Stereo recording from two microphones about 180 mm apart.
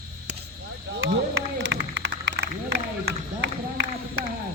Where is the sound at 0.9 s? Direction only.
70° right (ahead or behind).